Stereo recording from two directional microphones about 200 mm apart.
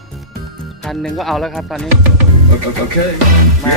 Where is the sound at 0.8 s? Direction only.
Centre (ahead or behind).